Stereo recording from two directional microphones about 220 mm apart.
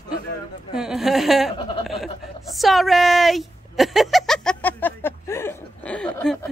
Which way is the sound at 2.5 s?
Centre (ahead or behind).